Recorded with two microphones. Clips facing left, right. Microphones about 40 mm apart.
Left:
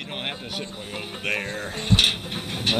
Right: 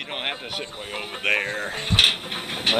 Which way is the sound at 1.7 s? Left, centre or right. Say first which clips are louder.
Right 1 dB; centre.